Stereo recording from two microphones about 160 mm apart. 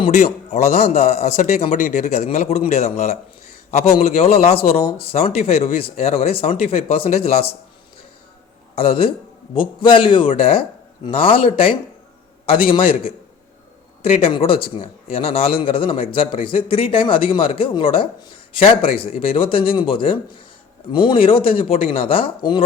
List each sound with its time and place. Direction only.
0.0 s a man's voice: 45° left (ahead or behind)
8.7 s a man's voice: 35° left (ahead or behind)